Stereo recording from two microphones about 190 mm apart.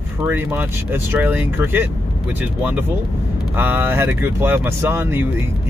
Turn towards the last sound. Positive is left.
turn(degrees=-10)  # may be behind; listen again after turning